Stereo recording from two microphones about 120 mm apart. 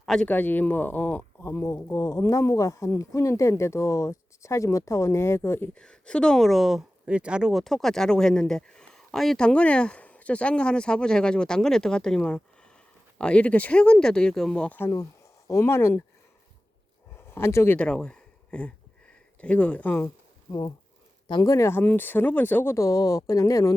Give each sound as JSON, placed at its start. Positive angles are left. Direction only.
{"t": 0.0, "sound": "speech", "side_deg": 0}
{"t": 0.3, "sound": "speech", "side_deg": 15}
{"t": 5.8, "sound": "speech", "side_deg": 5}
{"t": 14.8, "sound": "speech", "side_deg": 25}
{"t": 17.2, "sound": "speech", "side_deg": 20}
{"t": 17.7, "sound": "speech", "side_deg": 10}
{"t": 20.5, "sound": "speech", "side_deg": 30}